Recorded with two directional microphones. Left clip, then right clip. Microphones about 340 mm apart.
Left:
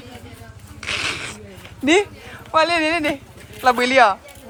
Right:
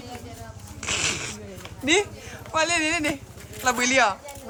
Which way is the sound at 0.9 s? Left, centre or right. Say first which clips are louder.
Left 3 dB; centre.